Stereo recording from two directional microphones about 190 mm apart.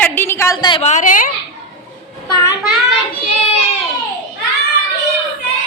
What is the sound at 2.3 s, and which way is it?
Speech, 20° left (ahead or behind).